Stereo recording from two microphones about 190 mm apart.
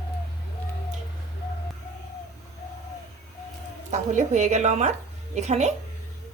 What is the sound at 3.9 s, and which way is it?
A woman's voice, 40° right (ahead or behind).